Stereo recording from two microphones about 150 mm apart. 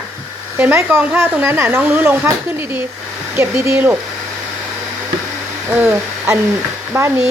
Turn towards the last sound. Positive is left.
turn(degrees=-15)  # may be behind; listen again after turning